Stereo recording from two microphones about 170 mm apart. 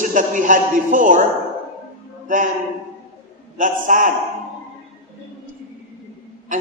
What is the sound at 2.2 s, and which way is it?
Speech, 50° right (ahead or behind).